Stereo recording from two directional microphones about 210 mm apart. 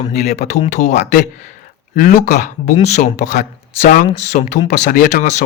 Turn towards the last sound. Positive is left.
turn(degrees=35)  # may be behind; listen again after turning